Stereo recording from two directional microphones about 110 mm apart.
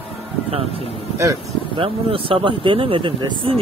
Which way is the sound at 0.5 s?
60° right (ahead or behind).